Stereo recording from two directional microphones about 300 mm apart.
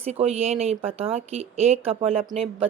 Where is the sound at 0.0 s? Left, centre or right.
Right.